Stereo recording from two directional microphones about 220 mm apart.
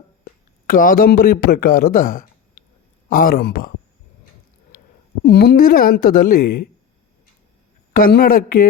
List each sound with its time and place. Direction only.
0.7 s speech: 40° left (ahead or behind)
5.2 s speech: 45° left (ahead or behind)
7.9 s speech: 40° left (ahead or behind)